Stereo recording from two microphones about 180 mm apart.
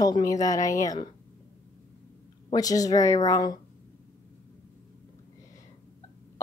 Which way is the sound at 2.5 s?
20° left (ahead or behind).